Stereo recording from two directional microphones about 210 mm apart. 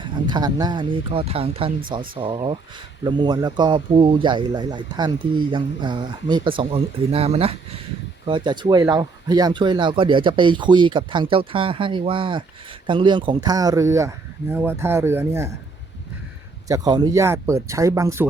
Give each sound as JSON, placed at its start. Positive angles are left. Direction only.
{"t": 0.0, "sound": "a man's voice", "side_deg": -20}
{"t": 16.6, "sound": "speech", "side_deg": -15}